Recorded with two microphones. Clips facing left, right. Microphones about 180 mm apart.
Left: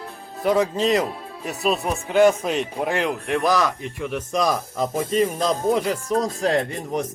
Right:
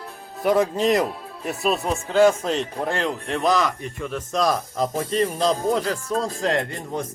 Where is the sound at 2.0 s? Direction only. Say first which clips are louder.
Left 1 dB; 15° left (ahead or behind).